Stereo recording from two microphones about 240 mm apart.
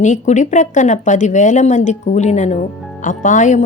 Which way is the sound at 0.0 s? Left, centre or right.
Left.